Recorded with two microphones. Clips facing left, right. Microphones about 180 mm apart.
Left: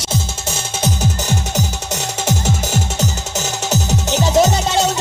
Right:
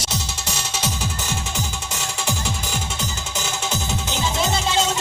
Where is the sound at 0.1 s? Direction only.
50° left (ahead or behind).